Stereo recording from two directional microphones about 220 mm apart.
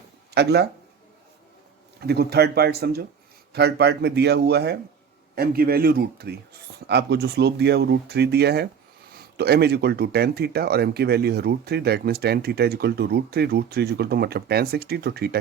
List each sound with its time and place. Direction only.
0.3 s speech: 50° right (ahead or behind)
2.0 s speech: 45° right (ahead or behind)